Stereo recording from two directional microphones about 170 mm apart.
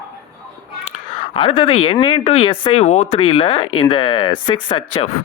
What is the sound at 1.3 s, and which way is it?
Speech, 30° left (ahead or behind).